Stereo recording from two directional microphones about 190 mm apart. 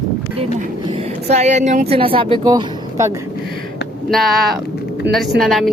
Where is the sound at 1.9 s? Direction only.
30° right (ahead or behind).